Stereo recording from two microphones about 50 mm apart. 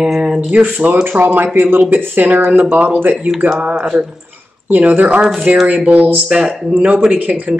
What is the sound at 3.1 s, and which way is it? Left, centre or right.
Speech, centre.